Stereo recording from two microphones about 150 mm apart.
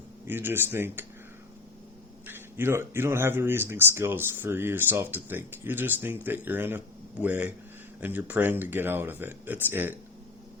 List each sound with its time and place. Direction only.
0.3 s speech: 15° right (ahead or behind)
2.2 s speech: 15° right (ahead or behind)